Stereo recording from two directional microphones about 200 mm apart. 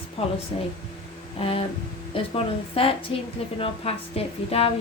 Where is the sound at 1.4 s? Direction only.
30° left (ahead or behind).